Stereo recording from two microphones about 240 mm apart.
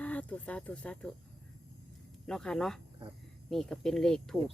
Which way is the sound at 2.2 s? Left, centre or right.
Centre.